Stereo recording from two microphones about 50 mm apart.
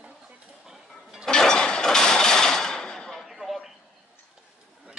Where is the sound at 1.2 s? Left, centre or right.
Centre.